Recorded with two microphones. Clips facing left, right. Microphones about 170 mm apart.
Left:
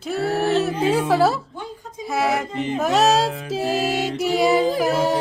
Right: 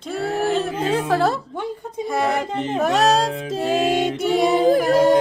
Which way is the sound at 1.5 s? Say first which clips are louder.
Right 7 dB; 65° right (ahead or behind).